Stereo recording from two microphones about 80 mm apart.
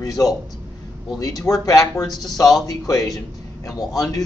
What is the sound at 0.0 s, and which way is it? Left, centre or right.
Speech, left.